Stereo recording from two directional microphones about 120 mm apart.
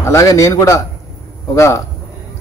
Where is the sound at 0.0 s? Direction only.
25° left (ahead or behind).